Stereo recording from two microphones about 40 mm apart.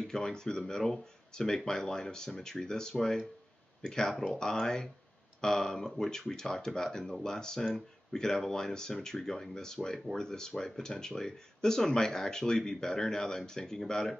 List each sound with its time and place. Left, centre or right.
0.1 s speech: centre